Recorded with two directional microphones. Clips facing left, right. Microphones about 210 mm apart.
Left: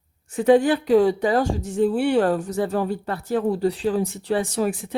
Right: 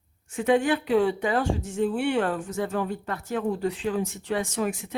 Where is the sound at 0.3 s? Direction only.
35° left (ahead or behind).